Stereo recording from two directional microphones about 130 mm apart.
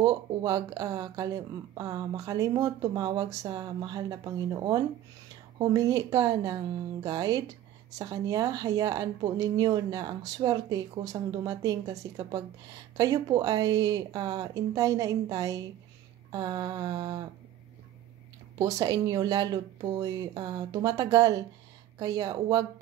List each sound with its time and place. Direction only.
0.0 s speech: 30° right (ahead or behind)
16.3 s a sound: 30° right (ahead or behind)
18.8 s speech: 30° right (ahead or behind)